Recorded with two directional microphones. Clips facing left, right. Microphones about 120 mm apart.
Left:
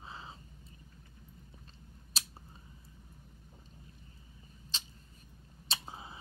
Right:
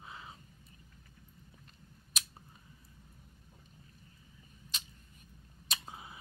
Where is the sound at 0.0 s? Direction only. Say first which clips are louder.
Left 2 dB; 30° left (ahead or behind).